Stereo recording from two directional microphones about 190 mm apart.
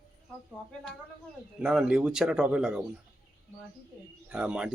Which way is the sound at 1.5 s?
5° right (ahead or behind).